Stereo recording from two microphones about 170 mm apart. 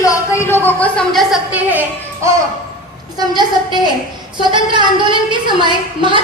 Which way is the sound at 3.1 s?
25° right (ahead or behind).